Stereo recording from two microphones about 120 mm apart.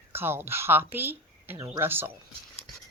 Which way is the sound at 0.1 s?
20° right (ahead or behind).